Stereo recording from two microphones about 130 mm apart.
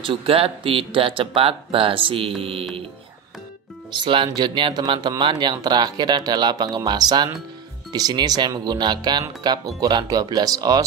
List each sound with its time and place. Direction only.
0.0 s speech: 45° right (ahead or behind)
3.9 s speech: 40° right (ahead or behind)